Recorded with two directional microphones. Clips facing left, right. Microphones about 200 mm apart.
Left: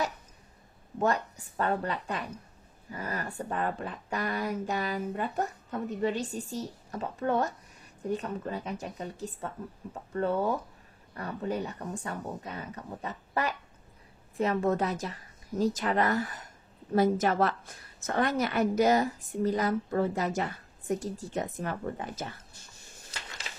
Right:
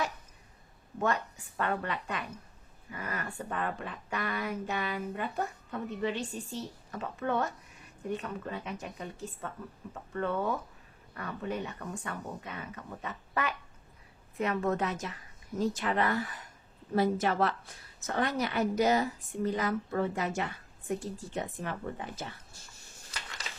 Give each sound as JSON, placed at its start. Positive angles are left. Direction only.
{"t": 0.9, "sound": "a woman's voice", "side_deg": 40}